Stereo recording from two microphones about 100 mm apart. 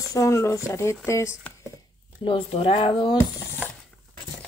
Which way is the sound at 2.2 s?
65° left (ahead or behind).